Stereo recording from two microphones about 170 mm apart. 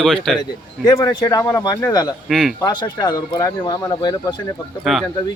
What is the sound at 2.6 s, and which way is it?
Speech, 25° left (ahead or behind).